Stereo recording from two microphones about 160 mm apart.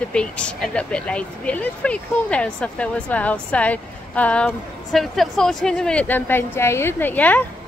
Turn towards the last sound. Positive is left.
turn(degrees=10)  # may be behind; listen again after turning